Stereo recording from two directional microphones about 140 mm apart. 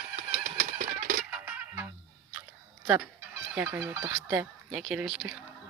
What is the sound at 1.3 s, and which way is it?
Music, 15° right (ahead or behind).